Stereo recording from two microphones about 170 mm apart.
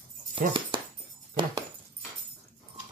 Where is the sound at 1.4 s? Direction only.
25° right (ahead or behind).